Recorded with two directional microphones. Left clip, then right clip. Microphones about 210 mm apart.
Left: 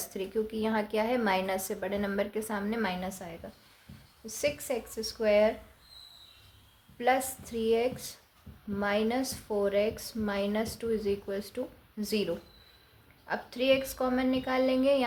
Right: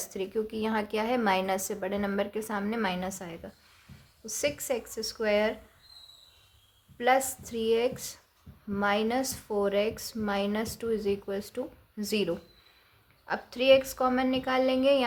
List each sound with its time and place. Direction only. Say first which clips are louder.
0.0 s a woman's voice: right 1 dB; 20° right (ahead or behind)
7.0 s a woman's voice: right 3 dB; 25° right (ahead or behind)